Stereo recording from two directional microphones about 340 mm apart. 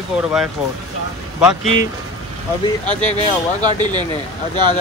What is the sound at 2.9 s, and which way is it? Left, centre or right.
Speech, left.